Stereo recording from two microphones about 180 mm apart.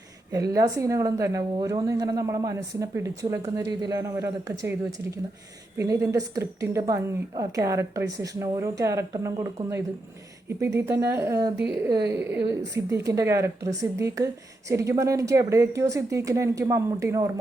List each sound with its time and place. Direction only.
0.3 s a woman's voice: 20° right (ahead or behind)
11.5 s speech: 70° right (ahead or behind)
11.9 s a woman's voice: 20° right (ahead or behind)